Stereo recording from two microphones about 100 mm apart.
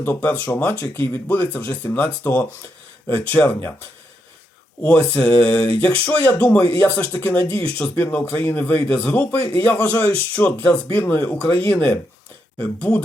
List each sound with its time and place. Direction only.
0.0 s speech: 15° left (ahead or behind)
4.9 s speech: 15° left (ahead or behind)